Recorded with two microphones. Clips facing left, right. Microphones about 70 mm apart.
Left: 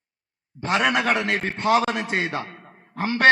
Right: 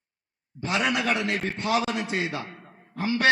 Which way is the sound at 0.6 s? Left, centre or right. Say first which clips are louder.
Left 4 dB; left.